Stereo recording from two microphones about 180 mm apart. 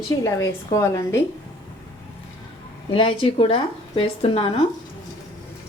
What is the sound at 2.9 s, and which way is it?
A woman's voice, 30° left (ahead or behind).